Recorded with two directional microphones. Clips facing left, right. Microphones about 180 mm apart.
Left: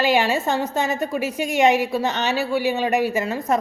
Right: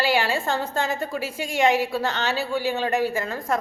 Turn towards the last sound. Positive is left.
turn(degrees=20)  # may be behind; listen again after turning